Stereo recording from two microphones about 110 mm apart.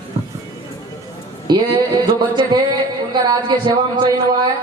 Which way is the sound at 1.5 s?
40° right (ahead or behind).